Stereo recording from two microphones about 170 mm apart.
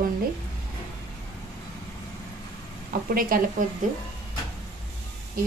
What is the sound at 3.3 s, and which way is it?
Speech, 55° right (ahead or behind).